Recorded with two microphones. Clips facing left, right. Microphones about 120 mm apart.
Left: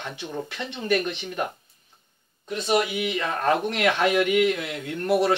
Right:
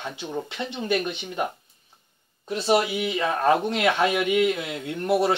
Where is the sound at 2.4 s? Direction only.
30° right (ahead or behind).